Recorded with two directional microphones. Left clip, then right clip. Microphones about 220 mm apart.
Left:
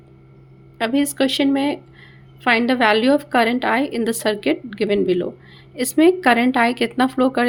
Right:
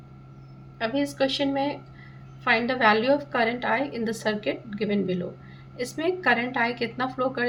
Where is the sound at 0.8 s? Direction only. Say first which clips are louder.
Left 6 dB; 50° left (ahead or behind).